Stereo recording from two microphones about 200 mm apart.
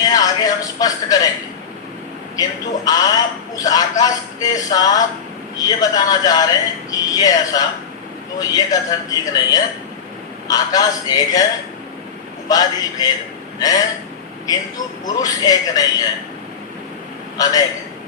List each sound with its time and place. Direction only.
0.0 s music: 20° left (ahead or behind)
2.3 s speech: 20° left (ahead or behind)
12.5 s speech: 20° left (ahead or behind)
15.0 s speech: 20° left (ahead or behind)
17.3 s a man's voice: 20° left (ahead or behind)